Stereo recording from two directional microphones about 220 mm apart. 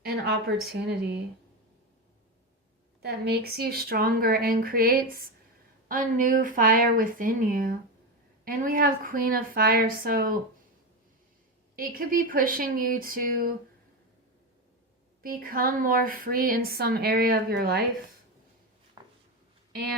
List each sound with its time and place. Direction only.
0.0 s speech: 45° right (ahead or behind)
3.0 s a woman's voice: 50° right (ahead or behind)
11.8 s a woman's voice: 40° right (ahead or behind)
15.2 s a woman's voice: 40° right (ahead or behind)
19.0 s a sound: 20° right (ahead or behind)